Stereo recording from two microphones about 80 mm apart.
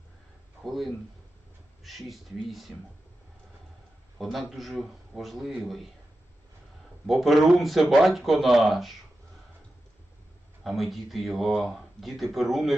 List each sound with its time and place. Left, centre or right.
0.6 s speech: centre
4.2 s speech: centre
7.1 s speech: centre
10.6 s speech: centre